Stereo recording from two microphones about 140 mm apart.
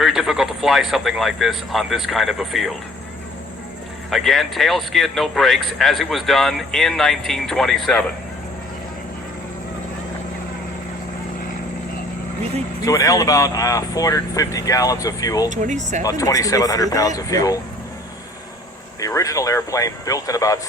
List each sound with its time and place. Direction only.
0.0 s speech: centre (ahead or behind)
4.1 s speech: centre (ahead or behind)
12.8 s speech: 25° left (ahead or behind)
15.6 s speech: 60° right (ahead or behind)
16.0 s speech: 25° left (ahead or behind)
18.9 s speech: 25° left (ahead or behind)